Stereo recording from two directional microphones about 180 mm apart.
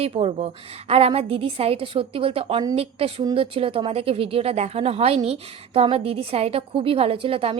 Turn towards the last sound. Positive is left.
turn(degrees=-30)  # may be behind; listen again after turning